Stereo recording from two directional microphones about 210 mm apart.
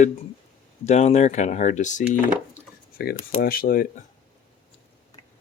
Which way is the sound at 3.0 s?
45° left (ahead or behind).